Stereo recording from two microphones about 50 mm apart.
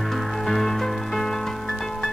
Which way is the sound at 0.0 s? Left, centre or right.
Centre.